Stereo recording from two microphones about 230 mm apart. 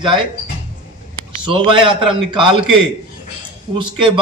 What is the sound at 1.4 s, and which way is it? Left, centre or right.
A man's voice, right.